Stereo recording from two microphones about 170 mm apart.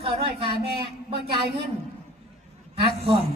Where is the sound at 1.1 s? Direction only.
30° right (ahead or behind).